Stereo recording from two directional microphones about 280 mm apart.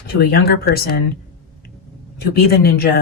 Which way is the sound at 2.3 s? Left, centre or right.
Left.